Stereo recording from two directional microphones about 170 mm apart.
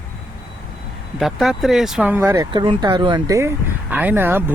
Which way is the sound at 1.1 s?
Centre (ahead or behind).